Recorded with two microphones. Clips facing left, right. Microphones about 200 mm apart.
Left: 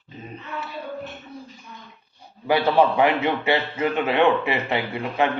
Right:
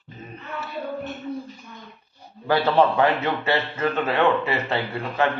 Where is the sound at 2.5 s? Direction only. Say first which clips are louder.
Left 1 dB; 15° left (ahead or behind).